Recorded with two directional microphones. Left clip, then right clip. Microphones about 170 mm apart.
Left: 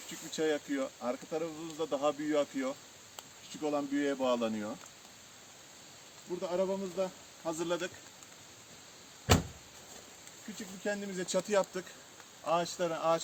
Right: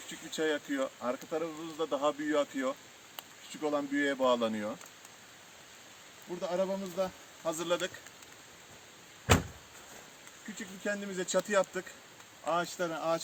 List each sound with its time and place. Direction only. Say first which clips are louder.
0.3 s speech: even; centre (ahead or behind)
3.2 s speech: right 2 dB; 15° right (ahead or behind)
6.4 s speech: right 1 dB; 75° right (ahead or behind)
7.4 s speech: right 2 dB; 40° right (ahead or behind)
10.8 s speech: right 1 dB; 15° left (ahead or behind)